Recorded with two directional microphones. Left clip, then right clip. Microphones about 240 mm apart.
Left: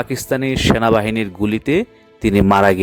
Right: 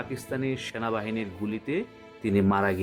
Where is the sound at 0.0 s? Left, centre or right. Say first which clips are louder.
Left 12 dB; left.